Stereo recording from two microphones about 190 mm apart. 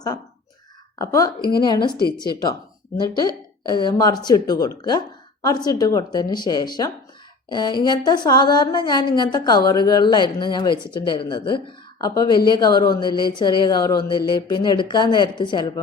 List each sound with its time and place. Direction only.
0.9 s speech: 15° left (ahead or behind)
3.7 s speech: 25° left (ahead or behind)